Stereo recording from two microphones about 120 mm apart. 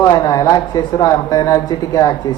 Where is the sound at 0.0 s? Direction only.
30° left (ahead or behind).